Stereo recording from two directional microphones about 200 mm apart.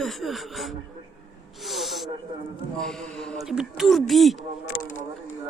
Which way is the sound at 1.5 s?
Centre (ahead or behind).